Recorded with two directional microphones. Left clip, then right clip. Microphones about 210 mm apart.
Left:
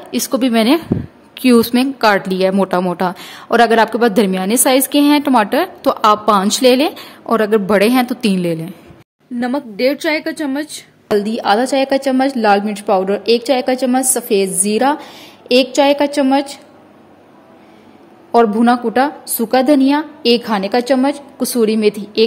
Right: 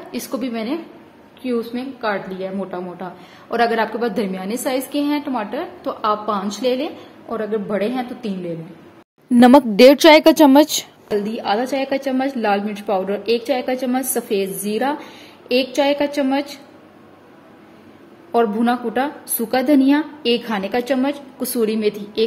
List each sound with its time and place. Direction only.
0.1 s a woman's voice: 30° left (ahead or behind)
1.3 s a woman's voice: 50° left (ahead or behind)
3.4 s a woman's voice: 35° left (ahead or behind)
9.3 s a woman's voice: 40° right (ahead or behind)
11.1 s a woman's voice: 25° left (ahead or behind)
18.3 s a woman's voice: 20° left (ahead or behind)